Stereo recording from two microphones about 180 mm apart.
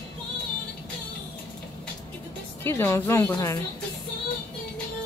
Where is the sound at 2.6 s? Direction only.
15° left (ahead or behind).